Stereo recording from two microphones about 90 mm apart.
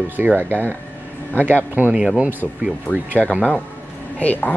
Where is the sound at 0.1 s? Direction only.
20° right (ahead or behind).